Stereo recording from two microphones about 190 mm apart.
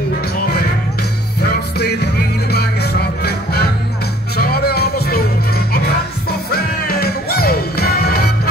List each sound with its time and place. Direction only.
1.4 s music: 55° left (ahead or behind)